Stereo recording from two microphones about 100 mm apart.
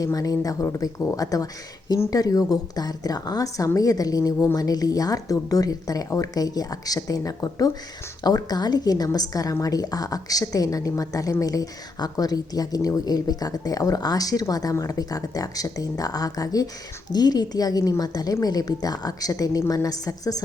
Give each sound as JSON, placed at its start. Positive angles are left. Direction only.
{"t": 0.0, "sound": "a woman's voice", "side_deg": 35}